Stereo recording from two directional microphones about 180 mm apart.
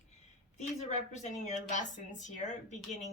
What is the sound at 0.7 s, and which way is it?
A woman's voice, 40° left (ahead or behind).